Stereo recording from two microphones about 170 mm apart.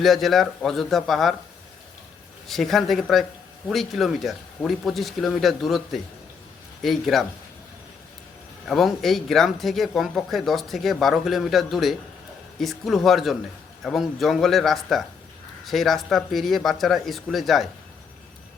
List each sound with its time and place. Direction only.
0.0 s speech: centre (ahead or behind)
2.5 s speech: centre (ahead or behind)
8.6 s speech: centre (ahead or behind)